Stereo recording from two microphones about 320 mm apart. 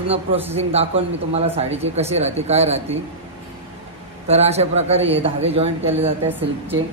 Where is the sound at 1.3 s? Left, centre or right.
Centre.